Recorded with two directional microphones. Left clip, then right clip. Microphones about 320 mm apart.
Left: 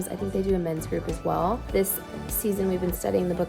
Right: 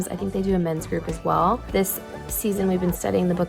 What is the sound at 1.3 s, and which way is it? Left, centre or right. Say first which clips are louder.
A woman's voice: right 5 dB; centre.